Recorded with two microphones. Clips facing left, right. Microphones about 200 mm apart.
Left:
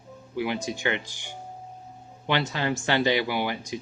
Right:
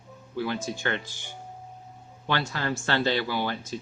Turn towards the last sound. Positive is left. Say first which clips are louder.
# left 1 dB
turn(degrees=15)  # may be behind; listen again after turning